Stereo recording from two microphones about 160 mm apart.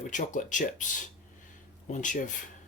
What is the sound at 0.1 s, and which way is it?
Speech, 50° left (ahead or behind).